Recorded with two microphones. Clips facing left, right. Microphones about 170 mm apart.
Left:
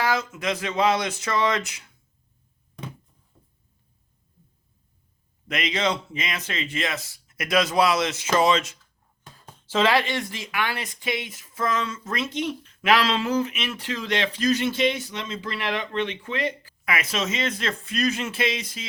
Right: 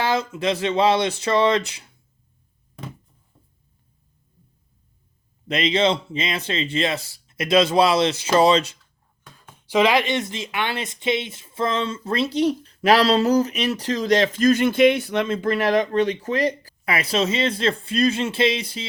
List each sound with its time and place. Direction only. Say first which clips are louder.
0.0 s speech: right 3 dB; 30° right (ahead or behind)
5.5 s speech: right 6 dB; 30° right (ahead or behind)
9.6 s speech: right 3 dB; 15° right (ahead or behind); by 18.9 s 30° right (ahead or behind)